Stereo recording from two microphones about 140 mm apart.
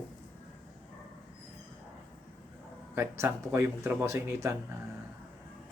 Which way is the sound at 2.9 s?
20° right (ahead or behind).